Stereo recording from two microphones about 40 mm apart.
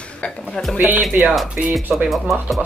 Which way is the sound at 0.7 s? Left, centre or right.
Right.